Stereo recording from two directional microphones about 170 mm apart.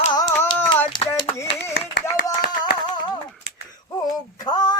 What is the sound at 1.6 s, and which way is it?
Clapping, 75° left (ahead or behind).